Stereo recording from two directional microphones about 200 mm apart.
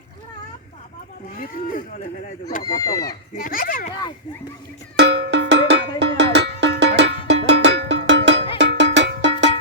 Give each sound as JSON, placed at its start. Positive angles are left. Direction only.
{"t": 2.6, "sound": "speech", "side_deg": 15}
{"t": 3.3, "sound": "speech", "side_deg": 45}
{"t": 4.9, "sound": "cowbell", "side_deg": -60}